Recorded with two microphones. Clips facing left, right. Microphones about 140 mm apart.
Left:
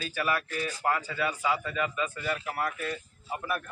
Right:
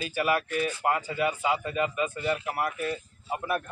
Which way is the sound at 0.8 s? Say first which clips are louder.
Right 1 dB; 20° right (ahead or behind).